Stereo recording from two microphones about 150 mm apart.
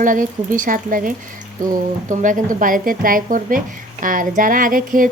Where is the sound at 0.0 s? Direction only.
60° right (ahead or behind).